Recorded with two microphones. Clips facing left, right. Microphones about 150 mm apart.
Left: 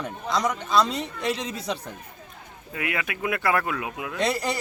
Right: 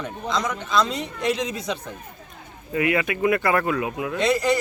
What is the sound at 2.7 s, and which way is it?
Speech, centre (ahead or behind).